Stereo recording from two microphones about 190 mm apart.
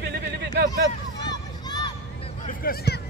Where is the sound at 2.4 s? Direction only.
50° left (ahead or behind).